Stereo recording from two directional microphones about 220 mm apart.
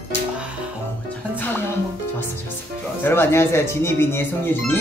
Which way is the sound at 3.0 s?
10° left (ahead or behind).